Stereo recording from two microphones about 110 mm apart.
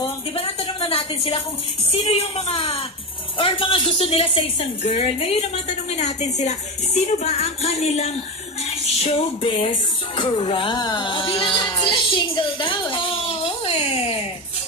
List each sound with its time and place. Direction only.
0.8 s a woman's voice: 60° left (ahead or behind)
3.3 s speech: 50° left (ahead or behind); by 8.1 s 85° left
9.4 s music: 50° left (ahead or behind)
10.8 s a child's voice: 40° left (ahead or behind); by 14.1 s 65° left (ahead or behind)